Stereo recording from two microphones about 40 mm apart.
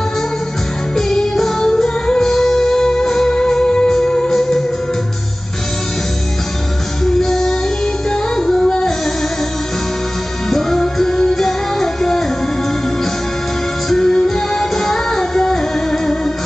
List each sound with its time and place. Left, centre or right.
0.9 s music: centre
7.1 s music: centre
8.5 s music: centre
10.5 s music: centre
13.9 s music: centre